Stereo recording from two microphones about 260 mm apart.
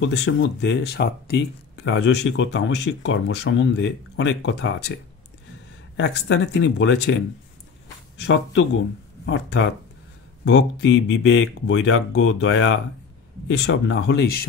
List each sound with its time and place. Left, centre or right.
0.0 s speech: left
5.9 s speech: left
8.2 s speech: left